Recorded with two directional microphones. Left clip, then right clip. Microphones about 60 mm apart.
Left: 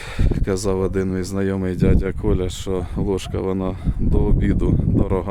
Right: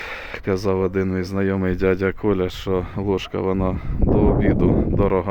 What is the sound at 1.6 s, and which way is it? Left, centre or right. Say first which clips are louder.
Speech: right 3 dB; left.